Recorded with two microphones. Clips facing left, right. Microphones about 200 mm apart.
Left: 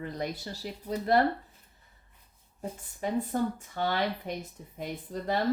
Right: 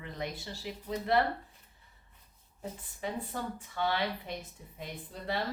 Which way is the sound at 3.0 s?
45° left (ahead or behind).